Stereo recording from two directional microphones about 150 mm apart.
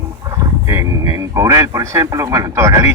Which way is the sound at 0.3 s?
20° right (ahead or behind).